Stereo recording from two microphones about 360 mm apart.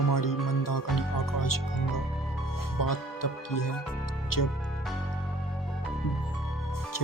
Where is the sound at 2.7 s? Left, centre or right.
Left.